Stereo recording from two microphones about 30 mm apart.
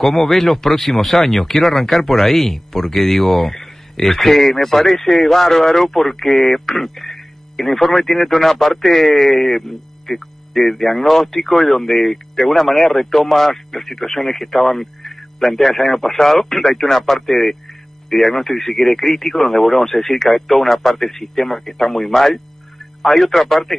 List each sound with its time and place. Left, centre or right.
0.0 s speech: centre